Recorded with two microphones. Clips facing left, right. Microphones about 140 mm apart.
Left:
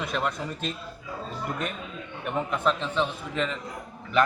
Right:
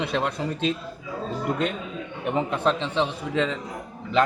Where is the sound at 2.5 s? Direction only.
30° right (ahead or behind).